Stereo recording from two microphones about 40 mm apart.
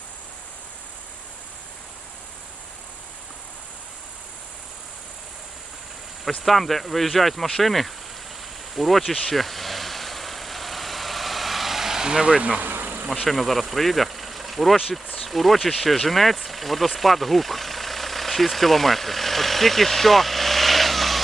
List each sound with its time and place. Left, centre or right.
6.4 s speech: centre
9.3 s vehicle: centre; by 12.4 s right
12.4 s speech: right
12.8 s insect: right
13.2 s speech: centre